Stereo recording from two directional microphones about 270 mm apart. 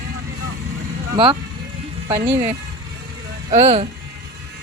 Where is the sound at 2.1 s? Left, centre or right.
Right.